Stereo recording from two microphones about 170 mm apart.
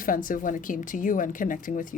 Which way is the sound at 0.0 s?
55° left (ahead or behind).